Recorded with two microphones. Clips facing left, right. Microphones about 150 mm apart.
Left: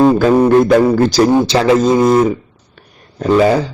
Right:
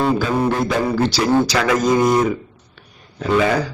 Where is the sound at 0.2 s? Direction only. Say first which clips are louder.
Left 9 dB; 45° left (ahead or behind).